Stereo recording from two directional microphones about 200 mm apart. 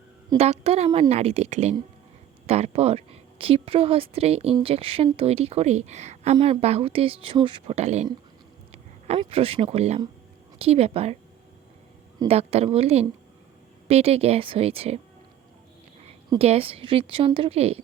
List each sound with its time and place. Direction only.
0.3 s speech: 30° right (ahead or behind)
8.7 s a sound: 30° right (ahead or behind)
10.6 s speech: 30° right (ahead or behind)
12.2 s speech: 30° right (ahead or behind)
16.4 s speech: 30° right (ahead or behind)